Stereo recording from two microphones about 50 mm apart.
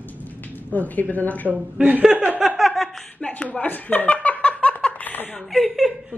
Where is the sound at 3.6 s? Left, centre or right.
Left.